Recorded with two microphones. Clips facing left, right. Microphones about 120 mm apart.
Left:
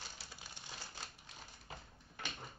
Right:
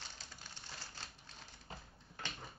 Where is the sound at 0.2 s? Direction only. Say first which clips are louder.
Left 1 dB; 10° left (ahead or behind).